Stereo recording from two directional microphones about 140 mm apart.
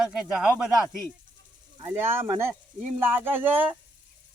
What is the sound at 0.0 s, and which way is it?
Speech, 5° right (ahead or behind).